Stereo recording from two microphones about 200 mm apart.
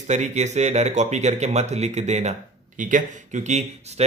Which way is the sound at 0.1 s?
35° right (ahead or behind).